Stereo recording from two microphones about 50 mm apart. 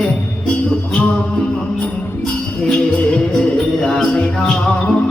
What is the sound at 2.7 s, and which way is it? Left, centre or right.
Music, centre.